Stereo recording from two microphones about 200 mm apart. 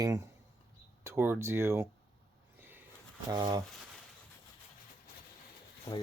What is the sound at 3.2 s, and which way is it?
Speech, 20° right (ahead or behind).